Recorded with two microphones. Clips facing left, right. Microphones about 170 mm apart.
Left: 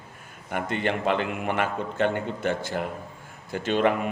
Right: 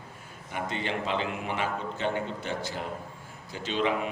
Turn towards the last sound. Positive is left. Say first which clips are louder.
# left 6 dB
turn(degrees=55)  # may be behind; listen again after turning